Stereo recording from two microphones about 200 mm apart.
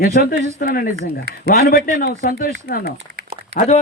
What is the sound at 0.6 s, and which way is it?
A man's voice, 45° left (ahead or behind).